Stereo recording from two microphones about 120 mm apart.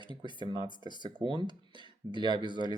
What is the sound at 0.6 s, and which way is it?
Speech, 40° left (ahead or behind).